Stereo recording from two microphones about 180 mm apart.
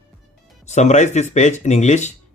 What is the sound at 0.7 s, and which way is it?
Speech, 40° left (ahead or behind).